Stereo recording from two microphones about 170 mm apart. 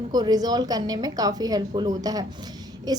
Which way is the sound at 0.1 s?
25° right (ahead or behind).